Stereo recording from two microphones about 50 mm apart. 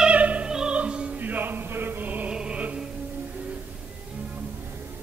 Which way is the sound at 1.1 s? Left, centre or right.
Right.